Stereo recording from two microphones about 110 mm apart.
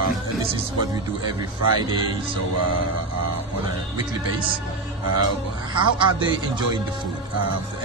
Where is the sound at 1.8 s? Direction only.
45° right (ahead or behind).